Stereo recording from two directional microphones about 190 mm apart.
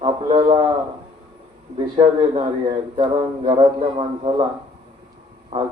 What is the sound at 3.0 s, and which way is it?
Speech, 25° right (ahead or behind).